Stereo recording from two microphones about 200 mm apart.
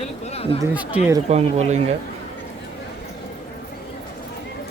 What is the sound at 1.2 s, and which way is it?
Speech, 35° right (ahead or behind).